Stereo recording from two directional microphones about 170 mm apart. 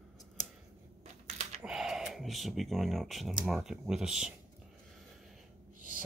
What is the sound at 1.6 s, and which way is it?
Speech, 5° right (ahead or behind).